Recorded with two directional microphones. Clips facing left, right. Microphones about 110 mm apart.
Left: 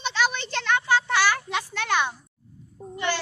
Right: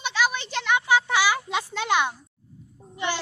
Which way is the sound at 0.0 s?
5° right (ahead or behind).